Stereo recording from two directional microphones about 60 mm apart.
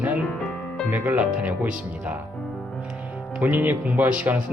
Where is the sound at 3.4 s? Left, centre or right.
Right.